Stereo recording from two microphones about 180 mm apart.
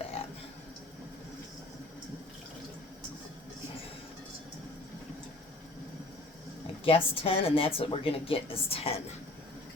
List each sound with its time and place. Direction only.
0.2 s burping: 30° left (ahead or behind)
6.8 s speech: 30° left (ahead or behind)